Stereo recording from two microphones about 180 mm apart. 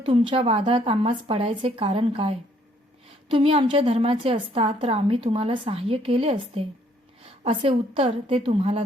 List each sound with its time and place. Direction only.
0.0 s a woman's voice: 30° right (ahead or behind)